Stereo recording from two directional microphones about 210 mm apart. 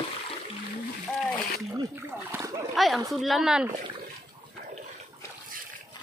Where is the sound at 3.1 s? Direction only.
Centre (ahead or behind).